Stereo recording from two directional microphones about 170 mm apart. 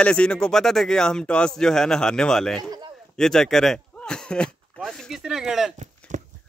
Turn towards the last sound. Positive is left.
turn(degrees=-45)  # may be behind; listen again after turning